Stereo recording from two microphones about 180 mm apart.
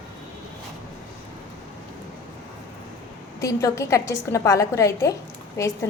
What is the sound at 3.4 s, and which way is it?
A woman's voice, 20° left (ahead or behind).